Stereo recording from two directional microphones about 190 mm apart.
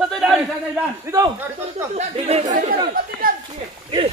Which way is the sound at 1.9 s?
35° right (ahead or behind).